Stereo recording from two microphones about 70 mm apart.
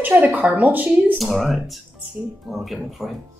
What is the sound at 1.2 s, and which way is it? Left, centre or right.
Speech, centre.